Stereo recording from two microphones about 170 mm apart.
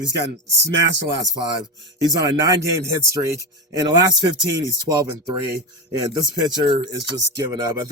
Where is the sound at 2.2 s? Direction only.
20° right (ahead or behind).